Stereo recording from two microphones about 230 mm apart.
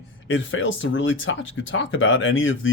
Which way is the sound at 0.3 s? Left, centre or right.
Left.